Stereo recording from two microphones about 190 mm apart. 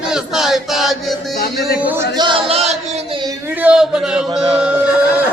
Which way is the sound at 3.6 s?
5° right (ahead or behind).